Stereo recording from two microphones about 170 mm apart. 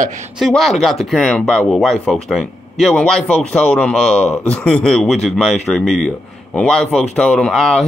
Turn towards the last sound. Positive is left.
turn(degrees=0)  # may be behind; listen again after turning